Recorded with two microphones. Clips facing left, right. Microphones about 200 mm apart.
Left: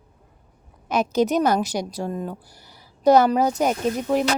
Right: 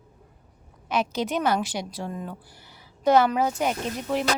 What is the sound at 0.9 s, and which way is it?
A woman's voice, 40° left (ahead or behind).